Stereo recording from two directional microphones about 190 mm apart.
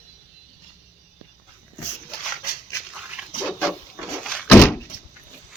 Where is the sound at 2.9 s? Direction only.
5° right (ahead or behind).